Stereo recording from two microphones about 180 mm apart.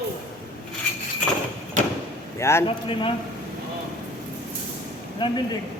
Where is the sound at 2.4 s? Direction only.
15° left (ahead or behind).